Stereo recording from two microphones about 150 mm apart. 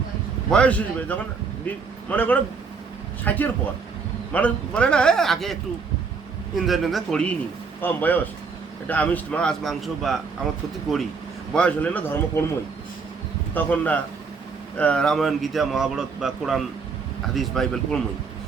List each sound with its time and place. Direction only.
0.5 s a man's voice: 10° left (ahead or behind)
6.6 s a man's voice: centre (ahead or behind)
11.5 s a man's voice: 10° left (ahead or behind)
13.5 s a man's voice: 10° left (ahead or behind)